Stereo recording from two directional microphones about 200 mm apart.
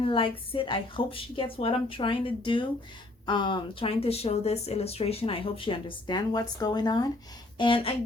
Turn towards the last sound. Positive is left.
turn(degrees=25)  # may be behind; listen again after turning